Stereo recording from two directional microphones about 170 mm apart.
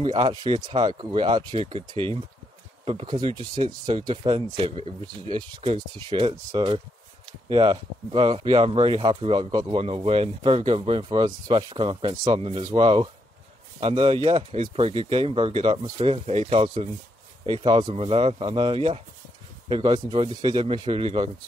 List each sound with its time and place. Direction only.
0.0 s speech: 30° right (ahead or behind)
9.8 s speech: 35° right (ahead or behind)